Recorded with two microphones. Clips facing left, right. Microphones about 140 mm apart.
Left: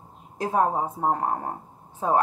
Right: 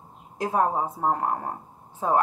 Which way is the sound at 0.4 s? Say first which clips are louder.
Left 1 dB; 40° left (ahead or behind).